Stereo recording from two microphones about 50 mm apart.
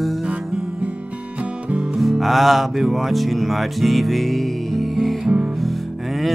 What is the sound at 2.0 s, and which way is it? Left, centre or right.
Music, centre.